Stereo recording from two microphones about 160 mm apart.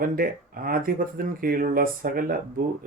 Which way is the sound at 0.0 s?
65° right (ahead or behind).